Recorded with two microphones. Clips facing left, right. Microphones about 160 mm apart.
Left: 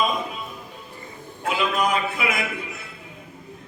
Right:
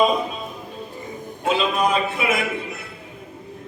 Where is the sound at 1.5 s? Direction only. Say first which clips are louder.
Right 3 dB; 25° right (ahead or behind).